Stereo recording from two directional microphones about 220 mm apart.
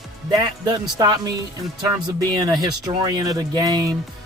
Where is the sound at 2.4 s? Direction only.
15° right (ahead or behind).